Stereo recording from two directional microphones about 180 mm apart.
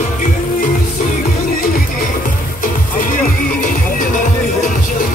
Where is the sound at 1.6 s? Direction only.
50° left (ahead or behind).